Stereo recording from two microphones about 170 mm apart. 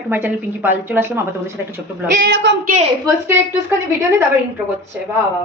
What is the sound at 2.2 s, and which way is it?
Speech, 90° right.